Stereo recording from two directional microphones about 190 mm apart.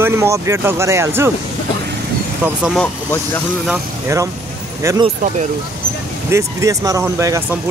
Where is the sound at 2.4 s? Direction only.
5° right (ahead or behind).